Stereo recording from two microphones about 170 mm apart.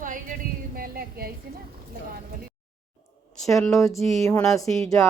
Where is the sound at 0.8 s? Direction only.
65° right (ahead or behind).